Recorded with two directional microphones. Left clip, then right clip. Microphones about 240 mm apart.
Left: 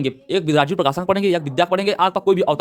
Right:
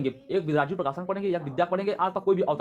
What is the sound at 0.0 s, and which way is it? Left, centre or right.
Speech, left.